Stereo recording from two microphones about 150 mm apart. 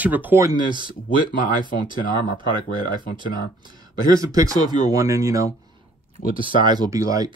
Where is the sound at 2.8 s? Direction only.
30° right (ahead or behind).